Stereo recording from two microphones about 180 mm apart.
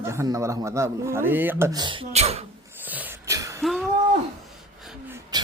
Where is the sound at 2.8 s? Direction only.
10° right (ahead or behind).